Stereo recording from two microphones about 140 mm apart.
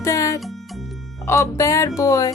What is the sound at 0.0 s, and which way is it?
Music, 20° left (ahead or behind).